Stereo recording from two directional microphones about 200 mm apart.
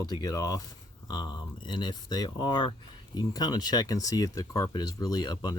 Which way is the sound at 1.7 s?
20° left (ahead or behind).